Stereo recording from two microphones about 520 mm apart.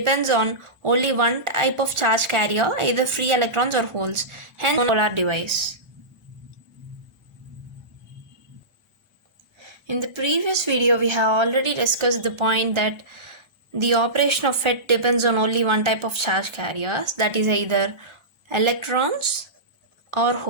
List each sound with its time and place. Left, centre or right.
0.0 s speech: right
9.6 s speech: right